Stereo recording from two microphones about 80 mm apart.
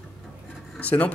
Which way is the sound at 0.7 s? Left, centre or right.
Centre.